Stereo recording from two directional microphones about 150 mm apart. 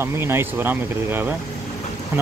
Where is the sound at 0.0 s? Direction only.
15° right (ahead or behind).